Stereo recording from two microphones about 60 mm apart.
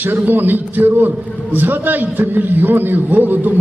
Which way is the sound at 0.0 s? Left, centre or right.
Right.